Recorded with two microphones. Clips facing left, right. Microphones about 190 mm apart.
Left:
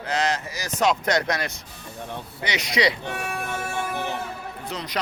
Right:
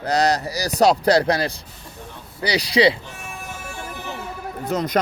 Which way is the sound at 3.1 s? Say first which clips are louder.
Left 6 dB; 70° left (ahead or behind).